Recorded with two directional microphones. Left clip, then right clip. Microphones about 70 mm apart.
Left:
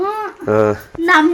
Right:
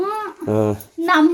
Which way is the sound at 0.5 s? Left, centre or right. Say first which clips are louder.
Left 6 dB; right.